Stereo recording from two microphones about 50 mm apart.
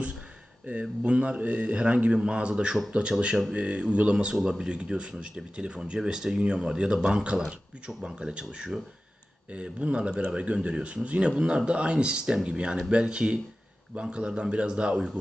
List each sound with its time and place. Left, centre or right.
0.7 s speech: right